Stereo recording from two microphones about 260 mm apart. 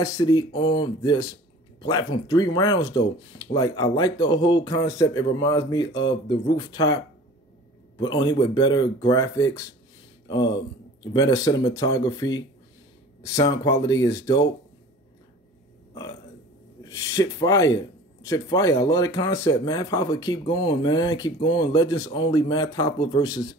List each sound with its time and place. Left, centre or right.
0.0 s speech: centre
8.0 s speech: centre
10.2 s a sound: centre
11.0 s speech: centre
16.9 s speech: centre